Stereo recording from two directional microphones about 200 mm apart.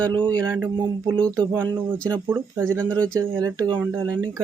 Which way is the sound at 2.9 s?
5° left (ahead or behind).